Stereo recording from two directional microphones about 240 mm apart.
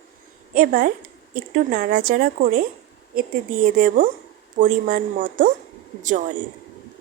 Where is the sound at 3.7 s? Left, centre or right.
Right.